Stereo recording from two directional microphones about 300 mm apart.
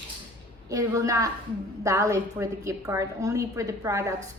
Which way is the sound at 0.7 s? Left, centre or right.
Centre.